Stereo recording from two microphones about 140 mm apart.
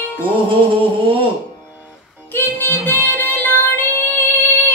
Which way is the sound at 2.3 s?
15° left (ahead or behind).